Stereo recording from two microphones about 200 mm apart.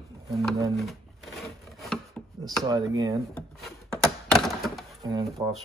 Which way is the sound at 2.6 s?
20° right (ahead or behind).